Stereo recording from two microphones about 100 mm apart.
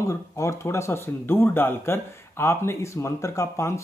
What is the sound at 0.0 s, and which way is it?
Speech, 30° left (ahead or behind).